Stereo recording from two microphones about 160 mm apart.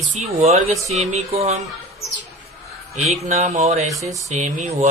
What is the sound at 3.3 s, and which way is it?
Speech, 45° right (ahead or behind).